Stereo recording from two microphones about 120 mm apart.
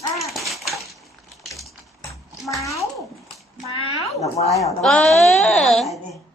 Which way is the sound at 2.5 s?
25° left (ahead or behind).